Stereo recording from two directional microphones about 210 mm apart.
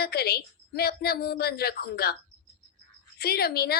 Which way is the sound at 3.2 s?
50° left (ahead or behind).